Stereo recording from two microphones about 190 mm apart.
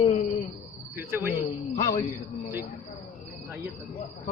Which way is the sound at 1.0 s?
10° right (ahead or behind).